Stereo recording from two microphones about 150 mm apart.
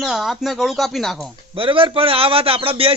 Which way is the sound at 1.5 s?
35° right (ahead or behind).